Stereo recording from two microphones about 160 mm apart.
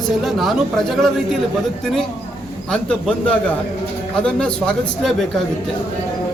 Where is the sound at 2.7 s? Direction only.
5° left (ahead or behind).